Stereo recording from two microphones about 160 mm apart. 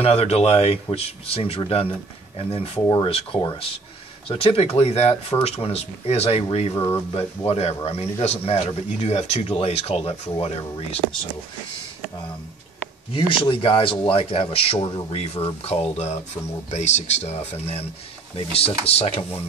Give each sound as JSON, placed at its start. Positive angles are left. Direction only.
{"t": 0.0, "sound": "speech", "side_deg": 40}
{"t": 6.7, "sound": "speech", "side_deg": 20}
{"t": 7.2, "sound": "speech", "side_deg": 40}
{"t": 13.1, "sound": "speech", "side_deg": 35}